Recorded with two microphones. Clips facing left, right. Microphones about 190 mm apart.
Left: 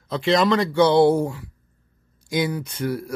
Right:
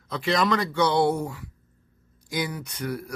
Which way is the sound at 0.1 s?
25° left (ahead or behind).